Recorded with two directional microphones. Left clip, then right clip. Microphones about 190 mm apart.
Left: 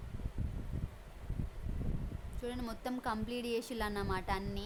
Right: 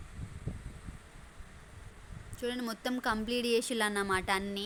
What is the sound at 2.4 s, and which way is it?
A woman's voice, 15° right (ahead or behind).